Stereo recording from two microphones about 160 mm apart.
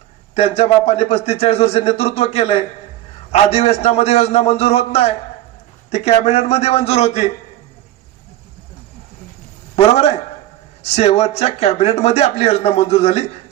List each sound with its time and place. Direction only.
0.3 s a man's voice: 40° left (ahead or behind)
9.8 s a man's voice: 40° left (ahead or behind)